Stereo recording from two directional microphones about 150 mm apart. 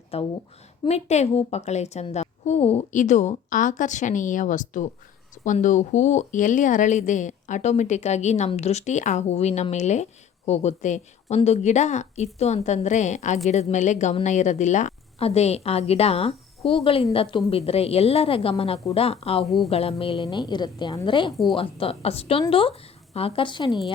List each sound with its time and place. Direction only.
0.1 s a woman's voice: 40° left (ahead or behind)
19.5 s speech: centre (ahead or behind)
19.7 s a woman's voice: 40° left (ahead or behind)